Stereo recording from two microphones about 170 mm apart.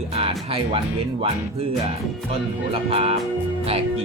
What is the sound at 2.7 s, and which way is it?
Speech, 35° right (ahead or behind).